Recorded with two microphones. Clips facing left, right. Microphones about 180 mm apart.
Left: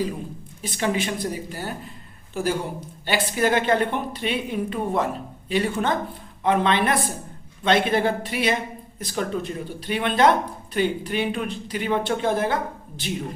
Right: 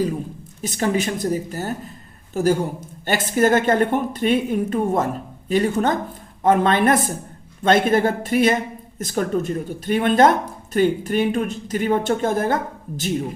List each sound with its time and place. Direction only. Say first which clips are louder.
0.6 s a woman's voice: right 3 dB; 45° right (ahead or behind)